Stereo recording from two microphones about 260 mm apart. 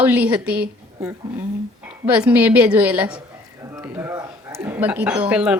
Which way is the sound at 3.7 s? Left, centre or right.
Centre.